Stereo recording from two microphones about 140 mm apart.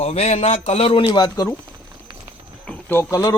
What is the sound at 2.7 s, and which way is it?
Speech, 15° left (ahead or behind).